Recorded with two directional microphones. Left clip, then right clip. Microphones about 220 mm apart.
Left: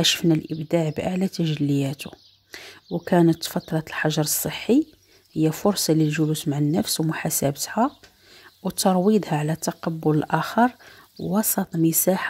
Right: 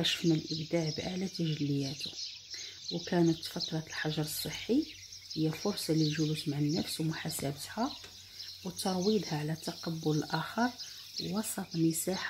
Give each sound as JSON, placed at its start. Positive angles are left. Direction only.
{"t": 0.0, "sound": "speech", "side_deg": 35}